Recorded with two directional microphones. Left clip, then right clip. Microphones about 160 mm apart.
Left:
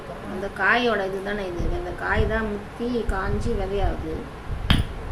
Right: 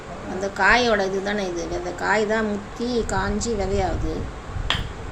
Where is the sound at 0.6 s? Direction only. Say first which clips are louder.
Right 3 dB; 30° right (ahead or behind).